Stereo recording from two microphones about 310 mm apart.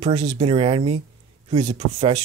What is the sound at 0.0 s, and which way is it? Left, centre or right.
Speech, centre.